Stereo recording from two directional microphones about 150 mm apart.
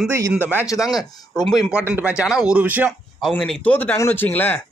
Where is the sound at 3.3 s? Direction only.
10° left (ahead or behind).